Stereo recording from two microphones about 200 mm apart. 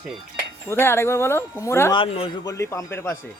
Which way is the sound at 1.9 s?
25° left (ahead or behind).